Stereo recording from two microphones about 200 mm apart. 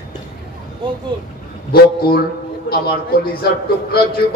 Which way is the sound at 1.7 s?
50° left (ahead or behind).